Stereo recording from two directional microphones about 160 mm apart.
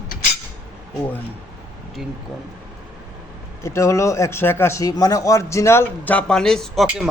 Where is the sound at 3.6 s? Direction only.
20° left (ahead or behind).